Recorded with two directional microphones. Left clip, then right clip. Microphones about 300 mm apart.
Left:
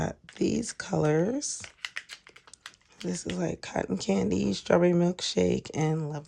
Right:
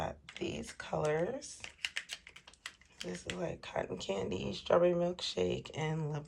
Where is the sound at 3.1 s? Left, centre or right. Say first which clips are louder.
Left 7 dB; left.